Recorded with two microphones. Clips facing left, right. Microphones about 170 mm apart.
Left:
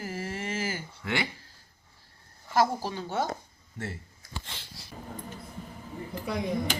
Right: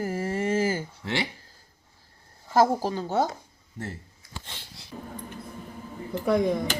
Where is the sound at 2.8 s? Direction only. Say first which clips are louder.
Right 5 dB; 45° right (ahead or behind).